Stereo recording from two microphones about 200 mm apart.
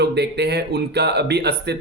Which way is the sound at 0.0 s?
55° right (ahead or behind).